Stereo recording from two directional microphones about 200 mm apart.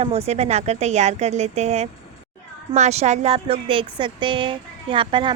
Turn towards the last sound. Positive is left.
turn(degrees=-25)  # may be behind; listen again after turning